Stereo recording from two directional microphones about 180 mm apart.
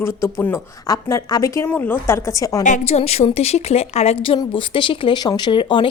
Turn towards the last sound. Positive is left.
turn(degrees=25)  # may be behind; listen again after turning